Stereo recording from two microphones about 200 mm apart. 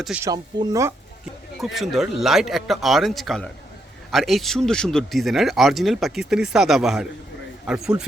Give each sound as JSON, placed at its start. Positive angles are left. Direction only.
{"t": 0.0, "sound": "speech", "side_deg": -5}
{"t": 0.3, "sound": "speech", "side_deg": -15}
{"t": 1.5, "sound": "speech", "side_deg": 0}